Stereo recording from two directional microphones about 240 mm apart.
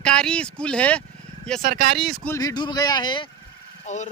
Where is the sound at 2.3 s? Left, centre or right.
Centre.